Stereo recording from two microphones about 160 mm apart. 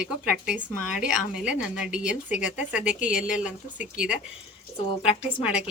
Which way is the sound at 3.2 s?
50° left (ahead or behind).